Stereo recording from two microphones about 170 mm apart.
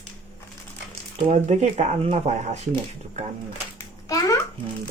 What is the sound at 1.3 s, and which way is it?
Speech, 40° right (ahead or behind).